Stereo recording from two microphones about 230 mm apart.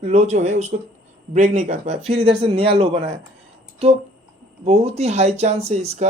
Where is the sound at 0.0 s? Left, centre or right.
Right.